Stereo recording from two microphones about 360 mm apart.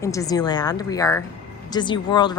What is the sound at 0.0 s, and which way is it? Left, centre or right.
Speech, centre.